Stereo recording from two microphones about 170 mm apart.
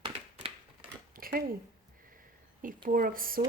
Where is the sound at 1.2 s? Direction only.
60° right (ahead or behind).